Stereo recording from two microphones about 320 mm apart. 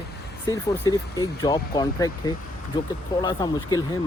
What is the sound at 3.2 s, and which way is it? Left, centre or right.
Speech, centre.